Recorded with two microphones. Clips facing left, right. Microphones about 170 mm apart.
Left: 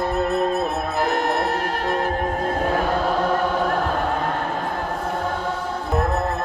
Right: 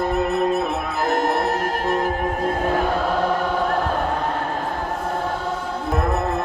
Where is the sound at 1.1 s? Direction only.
45° right (ahead or behind).